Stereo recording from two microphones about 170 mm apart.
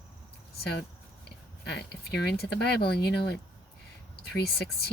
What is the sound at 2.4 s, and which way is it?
Speech, 70° left (ahead or behind).